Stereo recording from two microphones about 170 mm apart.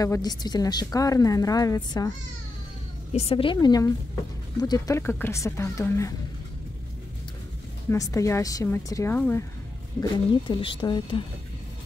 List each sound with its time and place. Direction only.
0.0 s a woman's voice: 20° left (ahead or behind)
3.1 s speech: 35° left (ahead or behind)
3.5 s a woman's voice: 20° left (ahead or behind)
7.9 s speech: 20° left (ahead or behind)
10.5 s speech: 30° left (ahead or behind)